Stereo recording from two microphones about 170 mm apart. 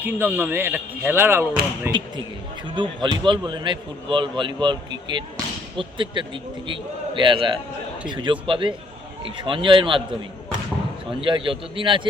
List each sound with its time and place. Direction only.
0.0 s speech: 10° right (ahead or behind)
2.6 s a man's voice: 25° right (ahead or behind)
11.2 s a man's voice: 30° right (ahead or behind)